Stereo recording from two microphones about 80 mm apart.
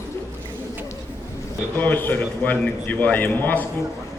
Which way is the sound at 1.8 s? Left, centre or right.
Left.